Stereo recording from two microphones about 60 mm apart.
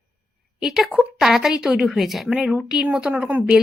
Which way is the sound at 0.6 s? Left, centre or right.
Centre.